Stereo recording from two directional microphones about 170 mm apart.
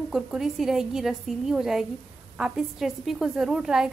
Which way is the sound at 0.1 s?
Centre (ahead or behind).